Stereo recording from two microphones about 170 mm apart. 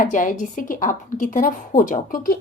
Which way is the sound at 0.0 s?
50° left (ahead or behind).